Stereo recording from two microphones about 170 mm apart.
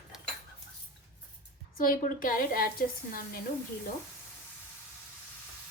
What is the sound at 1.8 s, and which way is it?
A woman's voice, 55° left (ahead or behind).